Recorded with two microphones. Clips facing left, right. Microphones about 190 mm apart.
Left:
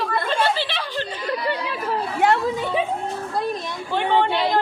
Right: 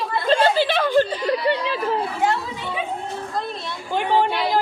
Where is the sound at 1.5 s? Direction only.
25° right (ahead or behind).